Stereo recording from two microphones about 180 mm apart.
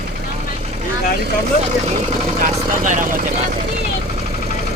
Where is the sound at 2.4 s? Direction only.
45° right (ahead or behind).